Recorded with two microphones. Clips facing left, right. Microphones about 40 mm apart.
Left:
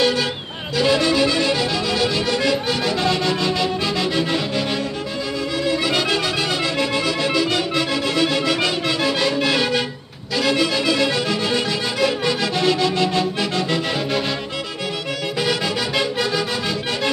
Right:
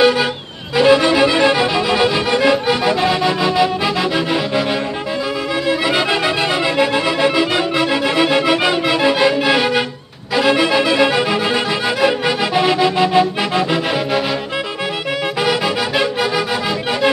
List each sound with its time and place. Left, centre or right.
0.0 s vehicle: centre
0.7 s music: right
5.7 s music: centre
15.4 s music: centre